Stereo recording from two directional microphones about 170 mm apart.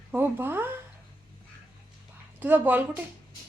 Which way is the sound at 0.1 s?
10° right (ahead or behind).